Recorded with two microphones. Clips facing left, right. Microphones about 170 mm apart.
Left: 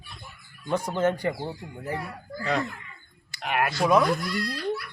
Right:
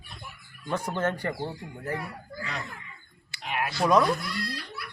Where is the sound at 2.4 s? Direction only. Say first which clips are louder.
Left 10 dB; 55° left (ahead or behind).